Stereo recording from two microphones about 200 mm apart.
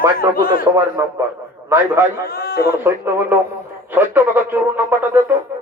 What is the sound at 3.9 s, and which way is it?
Speech, 10° right (ahead or behind).